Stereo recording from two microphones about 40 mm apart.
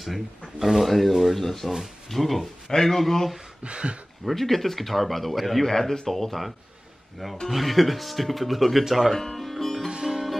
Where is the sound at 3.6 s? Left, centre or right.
Right.